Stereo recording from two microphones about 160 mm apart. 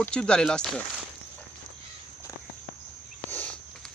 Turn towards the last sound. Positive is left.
turn(degrees=10)  # may be behind; listen again after turning